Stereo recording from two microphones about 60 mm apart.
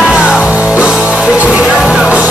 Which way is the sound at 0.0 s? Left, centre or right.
Centre.